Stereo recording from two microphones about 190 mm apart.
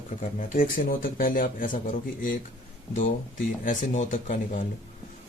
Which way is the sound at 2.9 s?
45° left (ahead or behind).